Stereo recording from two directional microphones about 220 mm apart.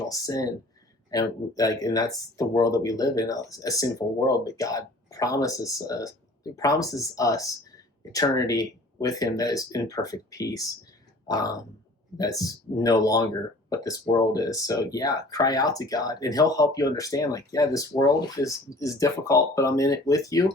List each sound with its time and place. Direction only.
0.1 s speech: 15° left (ahead or behind)